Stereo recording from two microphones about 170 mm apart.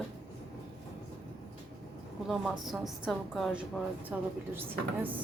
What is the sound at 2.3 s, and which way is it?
A woman's voice, centre (ahead or behind).